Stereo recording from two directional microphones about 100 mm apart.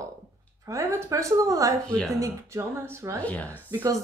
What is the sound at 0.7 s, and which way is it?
Speech, 30° right (ahead or behind).